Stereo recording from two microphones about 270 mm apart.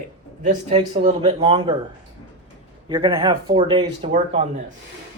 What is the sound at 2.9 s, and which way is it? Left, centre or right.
Speech, centre.